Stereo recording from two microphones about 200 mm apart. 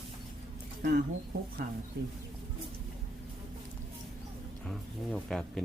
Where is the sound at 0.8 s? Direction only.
50° right (ahead or behind).